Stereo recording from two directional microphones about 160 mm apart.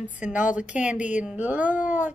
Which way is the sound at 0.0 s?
10° right (ahead or behind).